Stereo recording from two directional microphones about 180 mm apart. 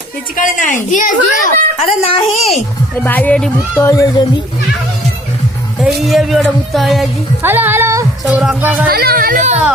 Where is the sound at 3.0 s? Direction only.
10° left (ahead or behind).